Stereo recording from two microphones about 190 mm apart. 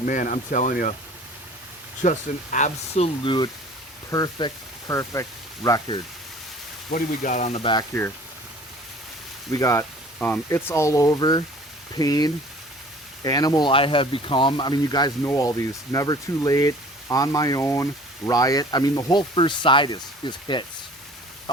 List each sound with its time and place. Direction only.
0.0 s speech: 45° left (ahead or behind)
2.0 s speech: 40° left (ahead or behind); by 6.0 s 20° left (ahead or behind)
6.9 s speech: 40° left (ahead or behind); by 7.9 s 25° left (ahead or behind)
9.5 s speech: 15° left (ahead or behind)